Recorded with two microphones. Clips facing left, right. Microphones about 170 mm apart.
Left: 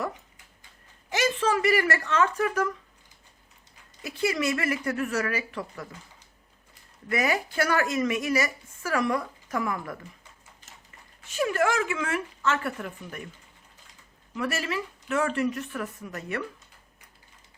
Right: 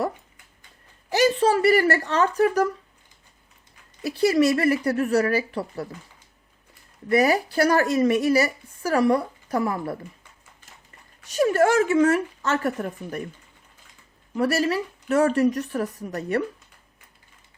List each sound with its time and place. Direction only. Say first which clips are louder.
1.1 s a woman's voice: right 6 dB; 35° right (ahead or behind)
4.0 s a woman's voice: right 8 dB; 35° right (ahead or behind)
7.1 s a woman's voice: right 7 dB; 35° right (ahead or behind)
11.2 s a woman's voice: right 6 dB; 40° right (ahead or behind)
14.3 s a woman's voice: right 8 dB; 40° right (ahead or behind)